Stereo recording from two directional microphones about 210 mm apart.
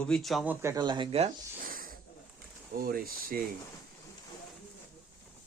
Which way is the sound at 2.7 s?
45° right (ahead or behind).